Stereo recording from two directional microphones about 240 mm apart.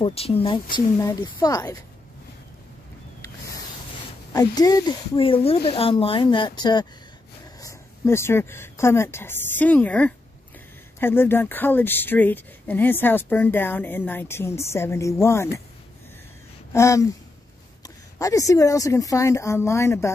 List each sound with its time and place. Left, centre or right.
0.0 s speech: left
4.3 s a woman's voice: centre
16.7 s a woman's voice: centre